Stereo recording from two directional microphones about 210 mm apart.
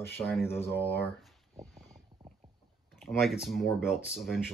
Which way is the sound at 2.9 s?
Centre (ahead or behind).